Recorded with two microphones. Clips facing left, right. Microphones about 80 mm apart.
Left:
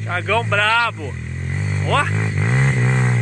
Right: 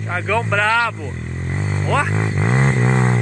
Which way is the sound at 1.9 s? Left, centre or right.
Centre.